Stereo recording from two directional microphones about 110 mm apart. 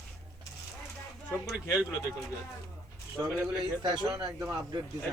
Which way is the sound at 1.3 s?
5° right (ahead or behind).